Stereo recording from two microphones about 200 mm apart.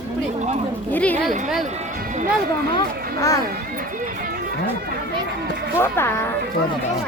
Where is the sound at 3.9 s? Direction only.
45° right (ahead or behind).